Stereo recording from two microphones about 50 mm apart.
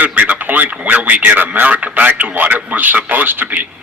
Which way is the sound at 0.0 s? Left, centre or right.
Right.